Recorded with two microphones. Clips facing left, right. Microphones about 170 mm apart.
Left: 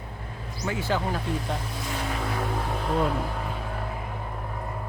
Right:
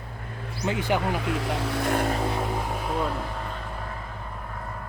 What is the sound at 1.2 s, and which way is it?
Speech, 80° right.